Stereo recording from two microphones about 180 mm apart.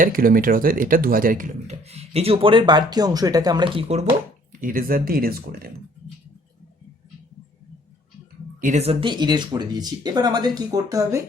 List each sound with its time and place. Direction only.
0.0 s speech: 50° right (ahead or behind); by 4.0 s 35° right (ahead or behind)
4.6 s speech: 50° right (ahead or behind)
8.6 s speech: 40° right (ahead or behind); by 11.2 s 20° right (ahead or behind)